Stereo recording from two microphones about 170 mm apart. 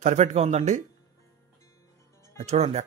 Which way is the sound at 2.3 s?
40° right (ahead or behind).